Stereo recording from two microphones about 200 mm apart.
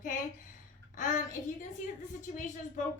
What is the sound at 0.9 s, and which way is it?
A woman's voice, 40° left (ahead or behind).